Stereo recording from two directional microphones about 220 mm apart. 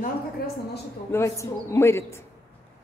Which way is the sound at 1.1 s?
15° left (ahead or behind).